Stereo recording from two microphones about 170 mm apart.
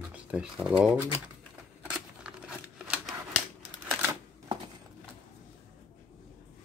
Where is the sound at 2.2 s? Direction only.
5° right (ahead or behind).